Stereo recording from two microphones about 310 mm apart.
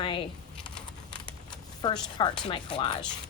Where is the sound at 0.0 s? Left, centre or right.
Centre.